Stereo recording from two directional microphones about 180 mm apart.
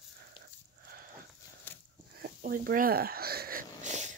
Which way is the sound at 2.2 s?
55° right (ahead or behind).